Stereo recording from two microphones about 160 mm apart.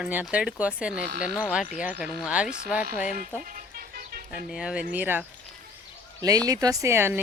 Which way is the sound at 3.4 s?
60° right (ahead or behind).